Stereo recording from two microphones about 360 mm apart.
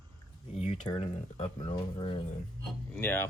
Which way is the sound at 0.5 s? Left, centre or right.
Centre.